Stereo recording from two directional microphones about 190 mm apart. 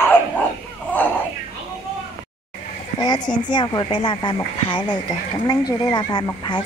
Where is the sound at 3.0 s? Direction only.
20° left (ahead or behind).